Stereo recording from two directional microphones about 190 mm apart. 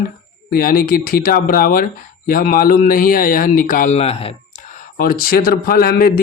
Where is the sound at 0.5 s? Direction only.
50° left (ahead or behind).